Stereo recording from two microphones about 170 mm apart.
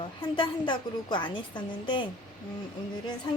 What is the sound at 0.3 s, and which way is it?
A woman's voice, 30° left (ahead or behind).